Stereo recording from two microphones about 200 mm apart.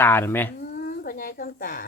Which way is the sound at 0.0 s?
10° left (ahead or behind).